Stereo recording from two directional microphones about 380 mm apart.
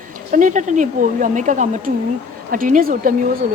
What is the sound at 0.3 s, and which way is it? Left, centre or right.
A woman's voice, centre.